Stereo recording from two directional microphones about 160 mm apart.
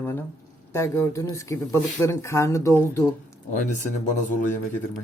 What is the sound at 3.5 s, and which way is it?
Speech, 50° left (ahead or behind).